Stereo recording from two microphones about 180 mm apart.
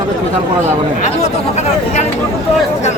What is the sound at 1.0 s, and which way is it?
Speech, 40° left (ahead or behind).